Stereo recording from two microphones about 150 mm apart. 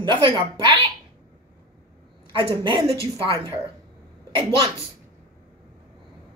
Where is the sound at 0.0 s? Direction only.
30° right (ahead or behind).